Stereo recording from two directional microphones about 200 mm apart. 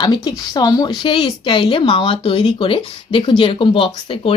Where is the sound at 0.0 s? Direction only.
20° left (ahead or behind).